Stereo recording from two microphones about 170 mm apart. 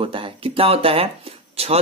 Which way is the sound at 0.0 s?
30° right (ahead or behind).